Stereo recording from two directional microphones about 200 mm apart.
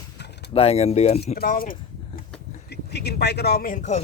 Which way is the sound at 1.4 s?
45° left (ahead or behind).